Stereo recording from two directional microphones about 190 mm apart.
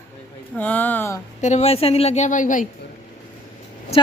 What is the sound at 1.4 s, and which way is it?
Speech, 35° left (ahead or behind).